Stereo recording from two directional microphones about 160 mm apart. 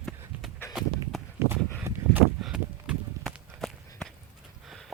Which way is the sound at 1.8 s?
10° right (ahead or behind).